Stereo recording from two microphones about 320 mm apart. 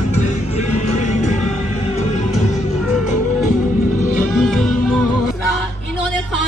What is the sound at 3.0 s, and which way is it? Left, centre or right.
Music, left.